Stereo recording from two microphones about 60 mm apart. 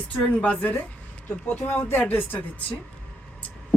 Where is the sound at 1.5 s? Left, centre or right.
Left.